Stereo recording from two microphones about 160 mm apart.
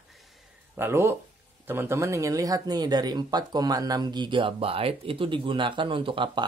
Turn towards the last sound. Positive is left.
turn(degrees=-30)  # may be behind; listen again after turning